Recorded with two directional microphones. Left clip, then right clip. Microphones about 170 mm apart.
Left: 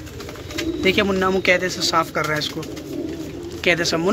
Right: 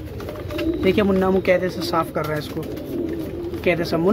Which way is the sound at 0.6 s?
Centre (ahead or behind).